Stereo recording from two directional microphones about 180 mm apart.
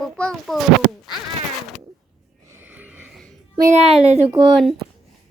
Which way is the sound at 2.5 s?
10° right (ahead or behind).